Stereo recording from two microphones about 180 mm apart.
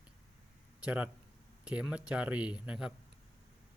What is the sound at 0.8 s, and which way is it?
Speech, 5° right (ahead or behind).